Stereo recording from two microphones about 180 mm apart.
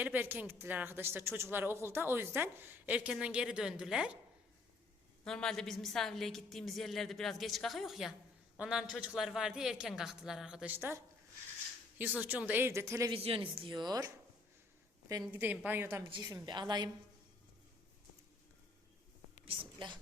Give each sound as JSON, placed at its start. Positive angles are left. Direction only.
{"t": 0.0, "sound": "a woman's voice", "side_deg": -10}
{"t": 5.2, "sound": "a woman's voice", "side_deg": 5}
{"t": 13.1, "sound": "a woman's voice", "side_deg": -30}
{"t": 15.3, "sound": "a woman's voice", "side_deg": -10}
{"t": 16.0, "sound": "a woman's voice", "side_deg": -25}
{"t": 19.5, "sound": "a woman's voice", "side_deg": -25}